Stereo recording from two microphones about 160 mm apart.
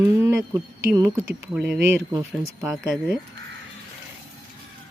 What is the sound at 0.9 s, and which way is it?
Speech, 15° right (ahead or behind).